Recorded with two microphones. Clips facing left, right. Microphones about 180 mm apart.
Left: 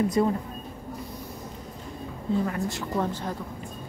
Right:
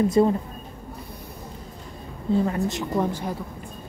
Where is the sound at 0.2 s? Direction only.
30° right (ahead or behind).